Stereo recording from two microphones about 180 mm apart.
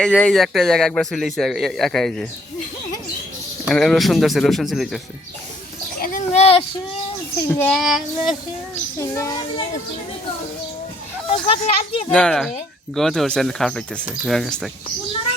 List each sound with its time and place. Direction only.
0.0 s a man's voice: 5° left (ahead or behind)
3.7 s a man's voice: centre (ahead or behind)
6.0 s a sound: 40° left (ahead or behind)
7.5 s a child's voice: 10° left (ahead or behind)
7.8 s a man's voice: centre (ahead or behind)
9.0 s speech: 20° left (ahead or behind)
11.3 s speech: 25° left (ahead or behind)
12.0 s a man's voice: 5° left (ahead or behind)